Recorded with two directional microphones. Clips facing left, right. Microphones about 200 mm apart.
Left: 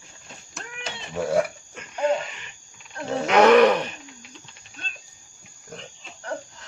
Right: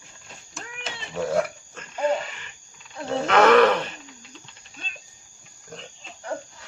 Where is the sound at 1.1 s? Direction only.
10° left (ahead or behind).